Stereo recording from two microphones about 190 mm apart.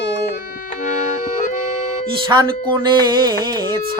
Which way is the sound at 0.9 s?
40° left (ahead or behind).